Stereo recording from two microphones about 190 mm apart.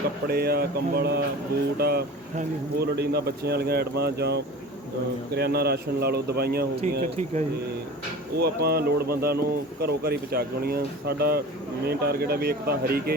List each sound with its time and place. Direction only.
0.3 s speech: 55° right (ahead or behind)
7.0 s speech: 40° right (ahead or behind)
8.4 s speech: 55° right (ahead or behind)